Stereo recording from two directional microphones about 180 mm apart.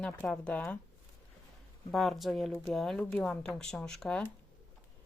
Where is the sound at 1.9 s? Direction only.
Centre (ahead or behind).